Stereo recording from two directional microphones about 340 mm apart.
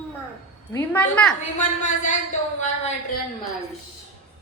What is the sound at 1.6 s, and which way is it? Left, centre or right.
Speech, left.